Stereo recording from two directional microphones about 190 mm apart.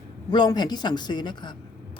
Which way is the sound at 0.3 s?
20° left (ahead or behind).